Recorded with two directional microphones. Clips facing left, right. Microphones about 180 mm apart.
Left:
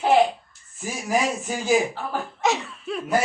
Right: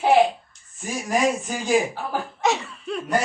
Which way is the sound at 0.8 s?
5° left (ahead or behind).